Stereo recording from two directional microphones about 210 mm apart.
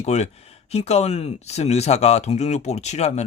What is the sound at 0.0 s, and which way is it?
Speech, 30° left (ahead or behind).